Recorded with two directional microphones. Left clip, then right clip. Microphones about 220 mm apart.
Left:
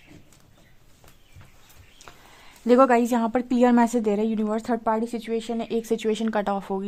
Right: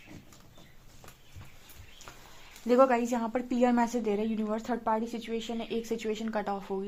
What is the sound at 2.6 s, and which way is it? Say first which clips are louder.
A woman's voice: left 6 dB; 45° left (ahead or behind).